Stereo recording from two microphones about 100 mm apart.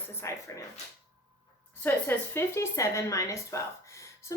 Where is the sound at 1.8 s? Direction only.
20° left (ahead or behind).